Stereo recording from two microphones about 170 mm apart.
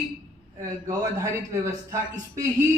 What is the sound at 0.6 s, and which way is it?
A man's voice, 20° right (ahead or behind).